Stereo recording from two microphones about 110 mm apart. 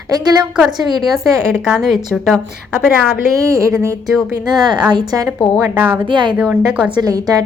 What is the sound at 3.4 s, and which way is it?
A woman's voice, 30° right (ahead or behind).